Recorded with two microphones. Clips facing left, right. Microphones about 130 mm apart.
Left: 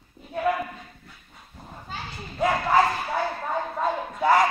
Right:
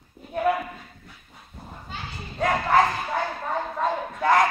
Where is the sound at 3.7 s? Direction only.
5° left (ahead or behind).